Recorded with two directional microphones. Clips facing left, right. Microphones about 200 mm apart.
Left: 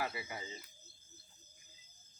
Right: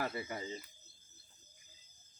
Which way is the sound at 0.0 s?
45° right (ahead or behind).